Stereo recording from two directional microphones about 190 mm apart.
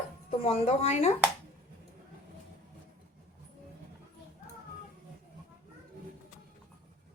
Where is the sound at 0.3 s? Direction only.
30° left (ahead or behind).